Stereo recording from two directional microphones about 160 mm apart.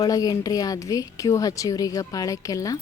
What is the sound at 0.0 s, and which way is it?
Speech, 25° left (ahead or behind).